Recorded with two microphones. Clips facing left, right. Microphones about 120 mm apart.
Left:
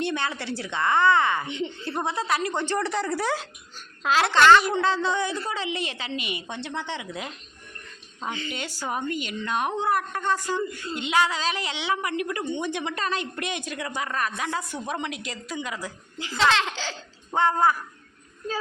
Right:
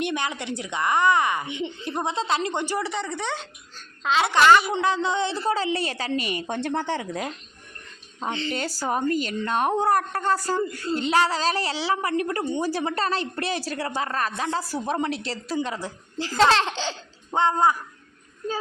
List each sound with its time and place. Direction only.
0.0 s a child's voice: 15° right (ahead or behind)
5.7 s a woman's voice: 40° right (ahead or behind)
8.2 s speech: 25° right (ahead or behind)
8.5 s a woman's voice: 40° right (ahead or behind); by 17.7 s 20° right (ahead or behind)